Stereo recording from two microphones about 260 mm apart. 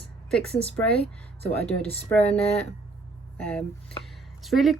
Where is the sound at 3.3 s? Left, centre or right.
Centre.